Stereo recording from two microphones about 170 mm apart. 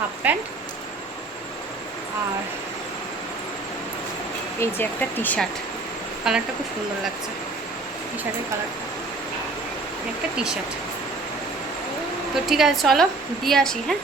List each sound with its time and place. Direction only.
0.2 s speech: 10° right (ahead or behind)
4.6 s speech: 10° left (ahead or behind)
6.3 s a woman's voice: 5° right (ahead or behind)
10.3 s a woman's voice: 5° right (ahead or behind)
12.3 s a woman's voice: centre (ahead or behind)